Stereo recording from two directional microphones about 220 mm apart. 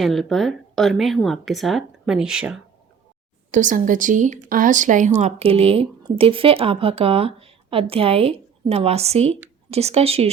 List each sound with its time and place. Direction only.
0.0 s a woman's voice: centre (ahead or behind)
3.5 s speech: 35° right (ahead or behind)